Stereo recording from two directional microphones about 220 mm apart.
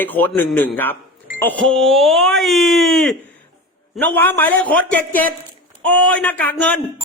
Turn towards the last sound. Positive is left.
turn(degrees=5)  # may be behind; listen again after turning